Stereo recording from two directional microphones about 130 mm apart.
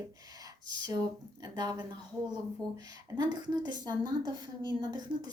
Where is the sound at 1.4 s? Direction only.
30° right (ahead or behind).